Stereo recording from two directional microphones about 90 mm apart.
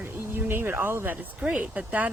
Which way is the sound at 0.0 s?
25° right (ahead or behind).